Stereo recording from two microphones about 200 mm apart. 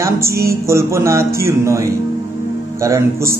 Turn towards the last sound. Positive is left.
turn(degrees=-15)  # may be behind; listen again after turning